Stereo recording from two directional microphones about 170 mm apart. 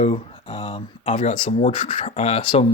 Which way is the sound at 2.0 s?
35° left (ahead or behind).